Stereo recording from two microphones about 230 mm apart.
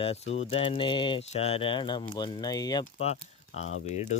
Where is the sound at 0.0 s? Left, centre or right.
Left.